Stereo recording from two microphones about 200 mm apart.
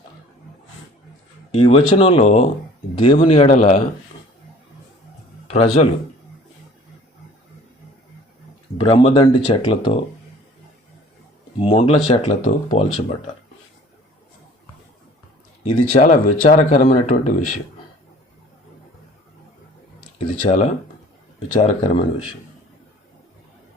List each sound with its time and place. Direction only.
1.5 s speech: 25° left (ahead or behind)
5.5 s speech: 30° left (ahead or behind)
8.8 s speech: 25° left (ahead or behind)
11.6 s speech: 25° left (ahead or behind)
16.0 s speech: 40° left (ahead or behind)
16.6 s speech: 30° left (ahead or behind)
20.1 s speech: 35° left (ahead or behind)